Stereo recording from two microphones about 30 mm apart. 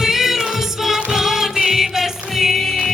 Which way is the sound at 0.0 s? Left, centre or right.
Centre.